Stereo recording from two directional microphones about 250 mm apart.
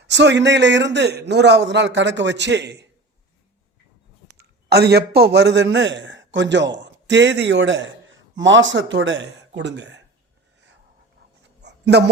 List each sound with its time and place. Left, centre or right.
0.1 s a man's voice: right
4.3 s a man's voice: right
11.6 s a sound: right